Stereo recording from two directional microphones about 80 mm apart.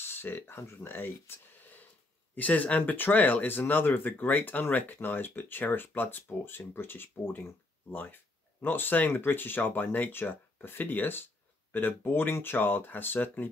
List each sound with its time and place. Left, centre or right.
0.0 s speech: left